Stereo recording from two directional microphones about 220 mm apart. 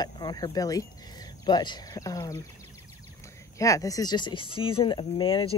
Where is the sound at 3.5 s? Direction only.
15° left (ahead or behind).